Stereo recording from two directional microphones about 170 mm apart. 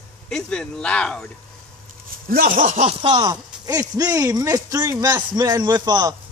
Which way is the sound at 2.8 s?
30° right (ahead or behind).